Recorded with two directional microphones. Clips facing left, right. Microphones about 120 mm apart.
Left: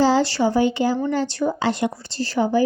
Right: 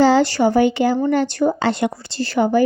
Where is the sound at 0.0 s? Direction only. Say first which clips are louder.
Right 4 dB; 60° right (ahead or behind).